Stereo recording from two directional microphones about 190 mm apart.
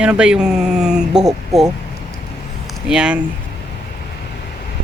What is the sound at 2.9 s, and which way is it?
Speech, 5° right (ahead or behind).